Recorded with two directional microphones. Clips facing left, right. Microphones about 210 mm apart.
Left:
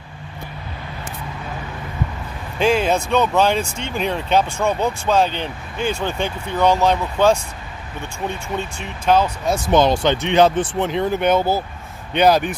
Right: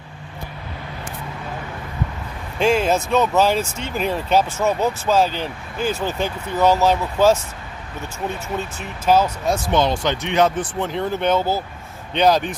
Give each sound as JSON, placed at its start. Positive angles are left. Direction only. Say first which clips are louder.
{"t": 2.6, "sound": "speech", "louder": "even", "side_deg": 0}
{"t": 10.0, "sound": "speech", "louder": "left 3 dB", "side_deg": 30}